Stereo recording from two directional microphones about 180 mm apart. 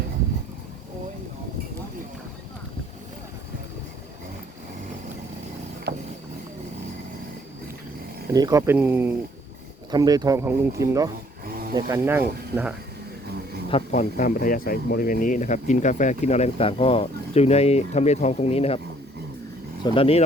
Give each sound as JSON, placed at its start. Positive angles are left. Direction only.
{"t": 5.9, "sound": "a sound", "side_deg": -70}
{"t": 8.3, "sound": "speech", "side_deg": -20}
{"t": 11.4, "sound": "snoring", "side_deg": -55}
{"t": 11.7, "sound": "speech", "side_deg": -15}
{"t": 13.7, "sound": "speech", "side_deg": 35}
{"t": 19.8, "sound": "speech", "side_deg": 30}